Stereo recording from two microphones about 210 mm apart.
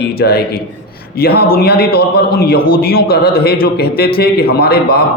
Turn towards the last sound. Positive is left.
turn(degrees=45)  # may be behind; listen again after turning